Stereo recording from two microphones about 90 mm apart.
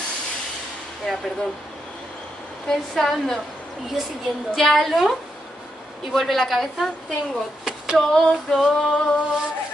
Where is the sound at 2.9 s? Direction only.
5° left (ahead or behind).